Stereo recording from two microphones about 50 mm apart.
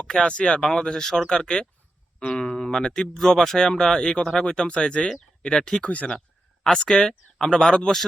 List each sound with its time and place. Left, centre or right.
0.1 s speech: centre
5.9 s speech: left
6.7 s speech: centre